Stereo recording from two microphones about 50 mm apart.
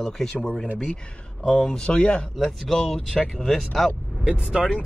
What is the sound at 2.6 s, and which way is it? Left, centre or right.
Speech, centre.